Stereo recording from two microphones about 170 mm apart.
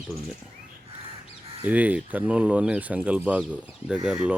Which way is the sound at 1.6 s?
10° right (ahead or behind).